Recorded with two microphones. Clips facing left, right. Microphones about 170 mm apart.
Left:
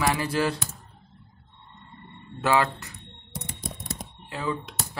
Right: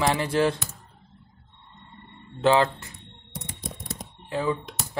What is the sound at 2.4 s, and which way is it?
Speech, 25° right (ahead or behind).